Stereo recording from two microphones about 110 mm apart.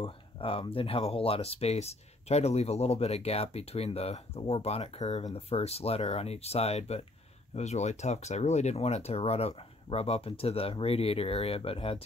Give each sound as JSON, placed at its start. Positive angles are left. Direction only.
{"t": 0.0, "sound": "speech", "side_deg": 55}
{"t": 5.3, "sound": "speech", "side_deg": 65}
{"t": 7.5, "sound": "speech", "side_deg": 90}